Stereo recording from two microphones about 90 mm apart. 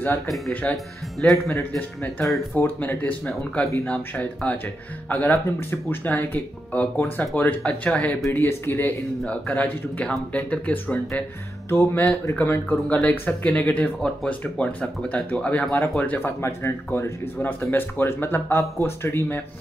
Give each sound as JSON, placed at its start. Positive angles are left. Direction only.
{"t": 0.5, "sound": "speech", "side_deg": 15}
{"t": 1.2, "sound": "speech", "side_deg": 0}
{"t": 1.5, "sound": "speech", "side_deg": 25}
{"t": 11.7, "sound": "speech", "side_deg": 30}